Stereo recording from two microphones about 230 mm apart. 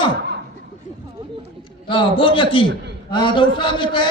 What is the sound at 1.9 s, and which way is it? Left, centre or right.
A man's voice, left.